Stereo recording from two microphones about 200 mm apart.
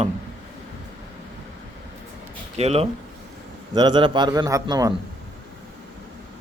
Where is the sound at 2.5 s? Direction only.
30° right (ahead or behind).